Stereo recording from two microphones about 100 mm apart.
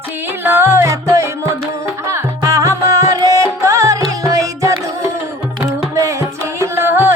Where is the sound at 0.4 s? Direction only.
25° right (ahead or behind).